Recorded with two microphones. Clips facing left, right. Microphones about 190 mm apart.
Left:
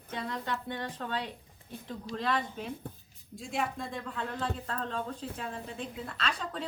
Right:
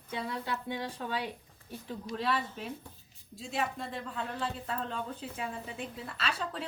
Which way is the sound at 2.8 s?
55° left (ahead or behind).